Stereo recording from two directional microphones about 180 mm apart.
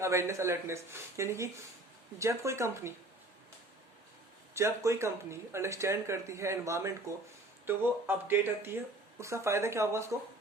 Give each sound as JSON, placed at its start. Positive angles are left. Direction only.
{"t": 0.0, "sound": "speech", "side_deg": -15}
{"t": 4.5, "sound": "speech", "side_deg": -15}